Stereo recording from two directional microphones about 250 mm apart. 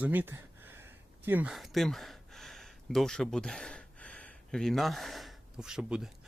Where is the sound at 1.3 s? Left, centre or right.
Centre.